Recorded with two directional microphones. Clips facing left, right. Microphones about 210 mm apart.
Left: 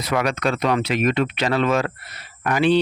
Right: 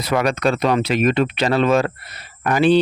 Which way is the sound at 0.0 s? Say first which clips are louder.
Right 3 dB; 35° right (ahead or behind).